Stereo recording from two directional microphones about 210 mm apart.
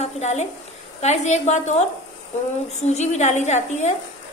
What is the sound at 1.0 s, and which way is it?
A woman's voice, 35° left (ahead or behind).